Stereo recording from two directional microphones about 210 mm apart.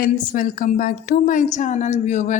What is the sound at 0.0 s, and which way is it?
A woman's voice, 40° left (ahead or behind).